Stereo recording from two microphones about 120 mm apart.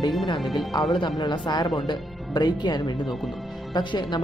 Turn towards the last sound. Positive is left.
turn(degrees=35)  # may be behind; listen again after turning